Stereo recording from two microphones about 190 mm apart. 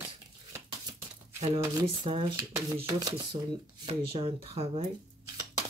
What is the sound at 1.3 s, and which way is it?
Speech, 30° right (ahead or behind).